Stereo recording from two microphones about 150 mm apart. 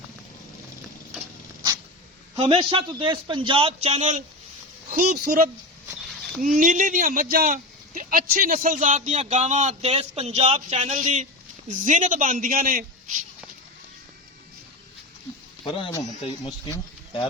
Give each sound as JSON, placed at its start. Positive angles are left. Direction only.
{"t": 2.4, "sound": "a man's voice", "side_deg": -35}
{"t": 4.9, "sound": "speech", "side_deg": -85}
{"t": 6.6, "sound": "a man's voice", "side_deg": -60}
{"t": 15.6, "sound": "a man's voice", "side_deg": 35}